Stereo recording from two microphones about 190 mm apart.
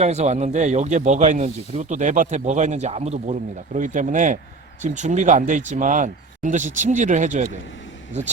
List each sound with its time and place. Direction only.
0.0 s speech: 35° right (ahead or behind)